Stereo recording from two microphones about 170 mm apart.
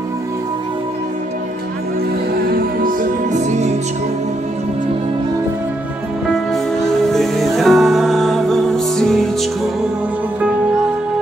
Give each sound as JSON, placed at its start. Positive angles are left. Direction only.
{"t": 2.5, "sound": "music", "side_deg": -55}
{"t": 6.5, "sound": "music", "side_deg": 0}